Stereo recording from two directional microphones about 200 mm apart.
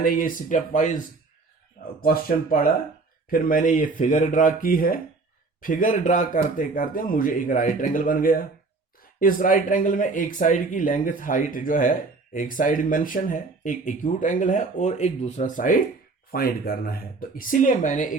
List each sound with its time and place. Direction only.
0.0 s speech: 45° left (ahead or behind)
2.0 s speech: 45° left (ahead or behind)